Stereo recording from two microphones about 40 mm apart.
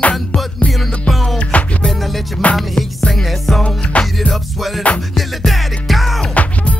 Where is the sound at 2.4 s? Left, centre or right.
Left.